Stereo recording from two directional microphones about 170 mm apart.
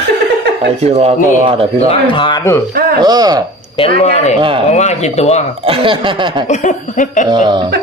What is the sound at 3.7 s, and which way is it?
Speech, 35° left (ahead or behind).